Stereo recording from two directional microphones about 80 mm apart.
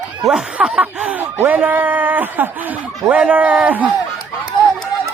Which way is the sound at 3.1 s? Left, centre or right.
Centre.